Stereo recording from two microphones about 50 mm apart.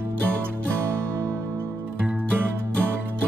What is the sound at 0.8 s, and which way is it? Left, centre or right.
Music, right.